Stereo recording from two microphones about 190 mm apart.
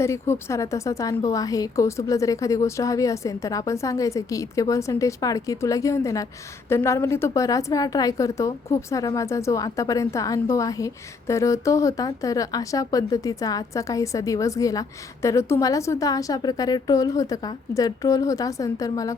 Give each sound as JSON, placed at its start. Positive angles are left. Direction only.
{"t": 0.0, "sound": "a woman's voice", "side_deg": 15}